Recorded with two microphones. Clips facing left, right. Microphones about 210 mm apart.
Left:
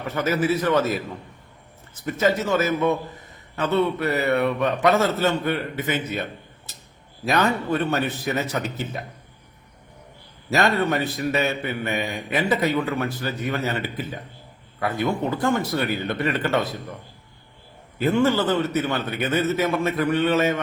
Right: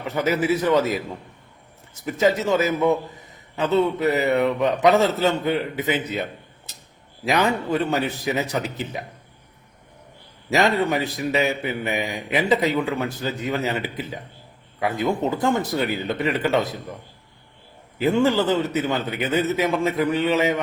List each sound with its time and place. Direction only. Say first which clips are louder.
0.0 s a man's voice: right 1 dB; 15° right (ahead or behind)
2.0 s a man's voice: right 2 dB; 15° right (ahead or behind)
7.3 s a man's voice: right 1 dB; 15° right (ahead or behind)
10.5 s a man's voice: right 1 dB; 15° right (ahead or behind)
17.9 s a man's voice: right 1 dB; 15° right (ahead or behind)